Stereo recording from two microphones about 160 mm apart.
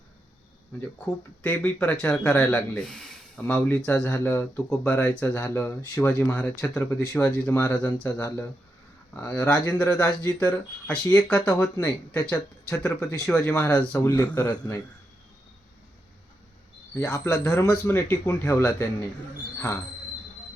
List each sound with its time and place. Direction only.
1.4 s speech: 15° left (ahead or behind)
16.9 s speech: 15° left (ahead or behind)